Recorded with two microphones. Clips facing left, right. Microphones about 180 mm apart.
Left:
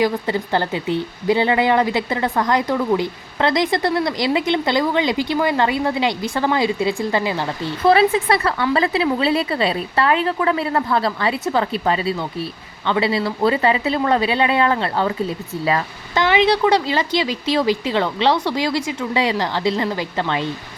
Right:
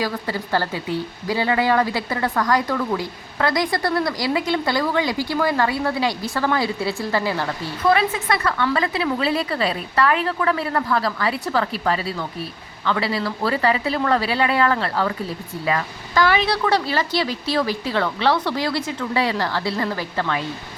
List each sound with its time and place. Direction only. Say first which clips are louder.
0.0 s speech: left 6 dB; 20° left (ahead or behind)
7.9 s speech: left 5 dB; 30° left (ahead or behind)